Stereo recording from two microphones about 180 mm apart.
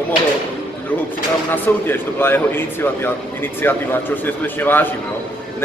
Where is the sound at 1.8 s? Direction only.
10° left (ahead or behind).